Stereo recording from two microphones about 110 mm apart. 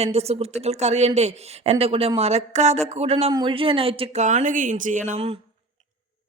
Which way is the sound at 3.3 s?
50° right (ahead or behind).